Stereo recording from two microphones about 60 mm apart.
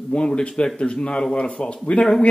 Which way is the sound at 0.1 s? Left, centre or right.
Centre.